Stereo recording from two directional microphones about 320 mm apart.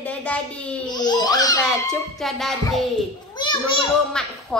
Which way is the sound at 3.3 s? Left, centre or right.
Centre.